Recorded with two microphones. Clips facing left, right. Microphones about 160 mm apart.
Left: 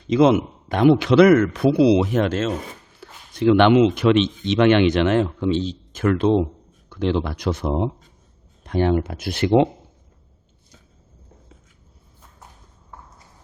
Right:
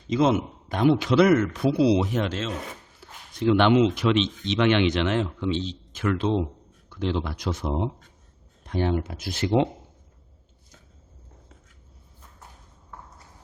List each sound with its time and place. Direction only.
0.1 s a man's voice: 75° left (ahead or behind); by 2.5 s 55° left (ahead or behind)
3.0 s speech: 70° left (ahead or behind)